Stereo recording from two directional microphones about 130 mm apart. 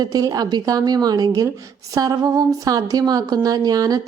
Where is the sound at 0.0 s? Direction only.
30° right (ahead or behind).